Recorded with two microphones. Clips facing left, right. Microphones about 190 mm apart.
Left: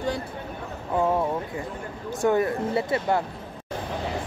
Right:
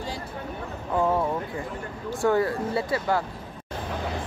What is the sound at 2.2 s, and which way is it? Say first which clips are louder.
Speech: left 1 dB; 20° left (ahead or behind).